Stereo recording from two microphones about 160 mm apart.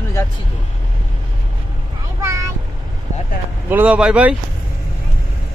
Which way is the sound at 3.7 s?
10° right (ahead or behind).